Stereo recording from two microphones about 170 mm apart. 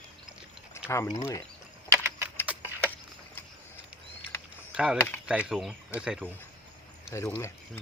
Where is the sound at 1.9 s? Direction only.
15° right (ahead or behind).